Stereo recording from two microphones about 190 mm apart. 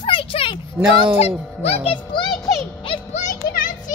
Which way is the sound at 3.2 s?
45° left (ahead or behind).